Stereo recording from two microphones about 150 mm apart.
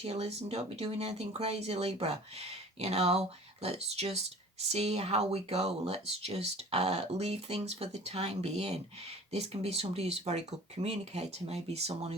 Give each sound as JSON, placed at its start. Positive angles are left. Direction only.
{"t": 0.0, "sound": "speech", "side_deg": -45}